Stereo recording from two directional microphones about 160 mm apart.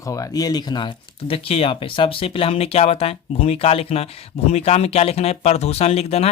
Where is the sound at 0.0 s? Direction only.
20° left (ahead or behind).